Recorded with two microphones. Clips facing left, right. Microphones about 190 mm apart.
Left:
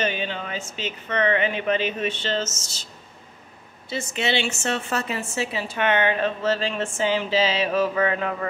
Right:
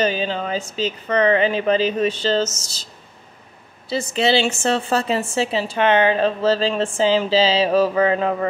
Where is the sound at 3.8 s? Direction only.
35° right (ahead or behind).